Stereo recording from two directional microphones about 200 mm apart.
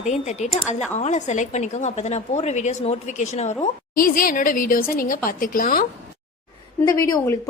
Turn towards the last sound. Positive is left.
turn(degrees=15)  # may be behind; listen again after turning